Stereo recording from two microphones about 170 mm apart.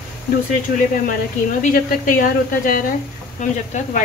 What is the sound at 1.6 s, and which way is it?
Speech, 50° left (ahead or behind).